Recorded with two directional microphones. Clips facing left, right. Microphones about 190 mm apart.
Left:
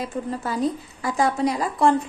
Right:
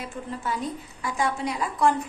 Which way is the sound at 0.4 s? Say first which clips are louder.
Left 5 dB; 35° left (ahead or behind).